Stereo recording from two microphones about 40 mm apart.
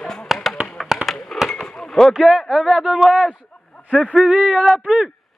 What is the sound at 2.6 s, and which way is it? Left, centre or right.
Speech, right.